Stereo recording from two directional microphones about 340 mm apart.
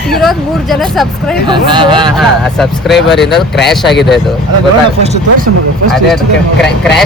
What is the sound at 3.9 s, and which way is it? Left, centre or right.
Speech, left.